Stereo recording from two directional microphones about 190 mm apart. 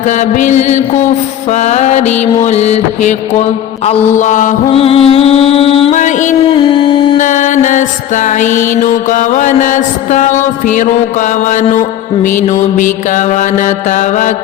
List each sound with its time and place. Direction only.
0.0 s mantra: 40° left (ahead or behind)
4.6 s music: 30° left (ahead or behind)
6.5 s music: 25° left (ahead or behind)
7.2 s mantra: 40° left (ahead or behind)